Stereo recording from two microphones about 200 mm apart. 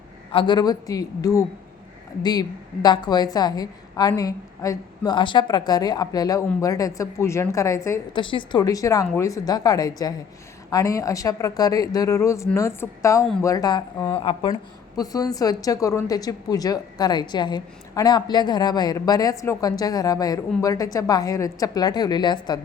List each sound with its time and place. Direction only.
0.3 s a woman's voice: 25° left (ahead or behind)